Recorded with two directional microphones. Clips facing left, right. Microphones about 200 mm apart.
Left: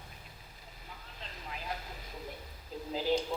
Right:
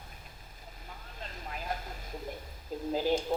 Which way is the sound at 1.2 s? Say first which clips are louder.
Right 3 dB; 45° right (ahead or behind).